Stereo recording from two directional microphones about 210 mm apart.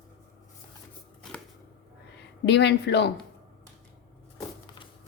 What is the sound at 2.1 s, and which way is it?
Speech, 55° left (ahead or behind).